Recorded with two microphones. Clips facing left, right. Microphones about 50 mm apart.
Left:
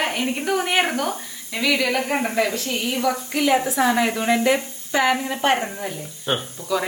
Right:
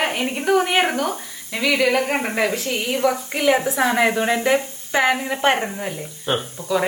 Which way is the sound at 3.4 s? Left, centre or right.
Right.